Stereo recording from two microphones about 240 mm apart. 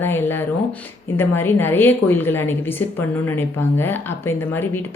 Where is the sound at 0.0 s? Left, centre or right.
Centre.